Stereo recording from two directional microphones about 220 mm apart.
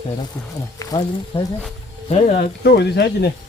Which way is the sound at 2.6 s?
45° left (ahead or behind).